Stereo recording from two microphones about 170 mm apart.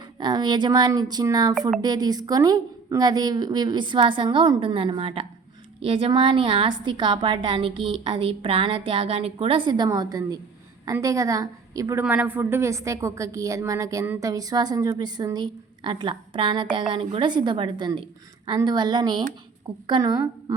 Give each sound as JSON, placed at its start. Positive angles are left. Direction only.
{"t": 0.2, "sound": "a woman's voice", "side_deg": -25}